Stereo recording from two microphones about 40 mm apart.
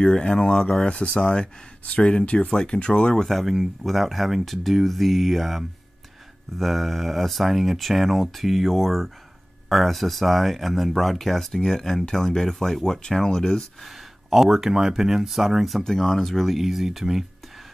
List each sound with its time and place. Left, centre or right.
0.0 s speech: centre
1.9 s speech: left
3.3 s speech: centre
14.3 s speech: centre
15.8 s speech: centre